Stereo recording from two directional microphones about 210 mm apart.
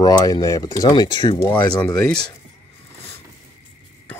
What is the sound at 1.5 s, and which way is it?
Speech, 5° left (ahead or behind).